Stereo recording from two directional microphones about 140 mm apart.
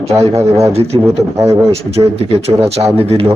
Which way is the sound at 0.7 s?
45° right (ahead or behind).